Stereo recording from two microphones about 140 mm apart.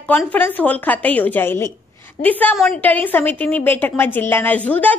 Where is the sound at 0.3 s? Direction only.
10° left (ahead or behind).